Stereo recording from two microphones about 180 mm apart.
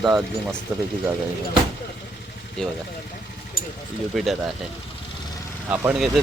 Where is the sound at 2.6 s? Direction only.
5° left (ahead or behind).